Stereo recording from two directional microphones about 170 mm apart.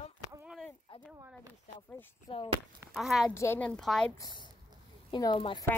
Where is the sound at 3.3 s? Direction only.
15° left (ahead or behind).